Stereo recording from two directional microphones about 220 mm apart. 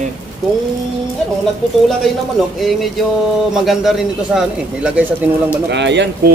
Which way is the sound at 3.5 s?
Centre (ahead or behind).